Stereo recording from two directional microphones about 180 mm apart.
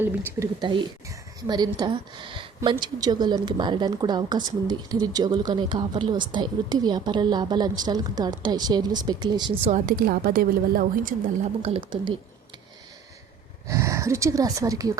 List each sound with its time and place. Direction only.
0.0 s speech: 10° right (ahead or behind)
0.6 s a woman's voice: 25° right (ahead or behind)
9.6 s a woman's voice: 45° right (ahead or behind)
13.7 s speech: 15° right (ahead or behind)